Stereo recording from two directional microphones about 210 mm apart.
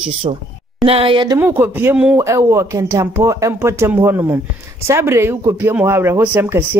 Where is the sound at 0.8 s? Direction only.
25° right (ahead or behind).